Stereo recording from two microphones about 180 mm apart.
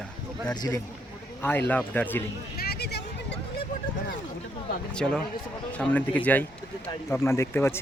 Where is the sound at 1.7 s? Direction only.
10° left (ahead or behind).